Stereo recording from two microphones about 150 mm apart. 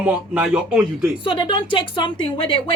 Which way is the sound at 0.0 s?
10° right (ahead or behind).